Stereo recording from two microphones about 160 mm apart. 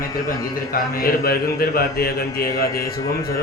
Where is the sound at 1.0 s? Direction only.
70° left (ahead or behind).